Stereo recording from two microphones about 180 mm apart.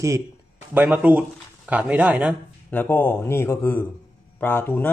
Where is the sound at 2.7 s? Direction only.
10° left (ahead or behind).